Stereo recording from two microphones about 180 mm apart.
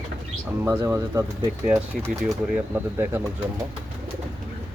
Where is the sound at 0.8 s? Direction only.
15° right (ahead or behind).